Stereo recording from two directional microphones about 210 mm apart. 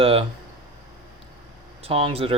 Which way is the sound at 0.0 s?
25° right (ahead or behind).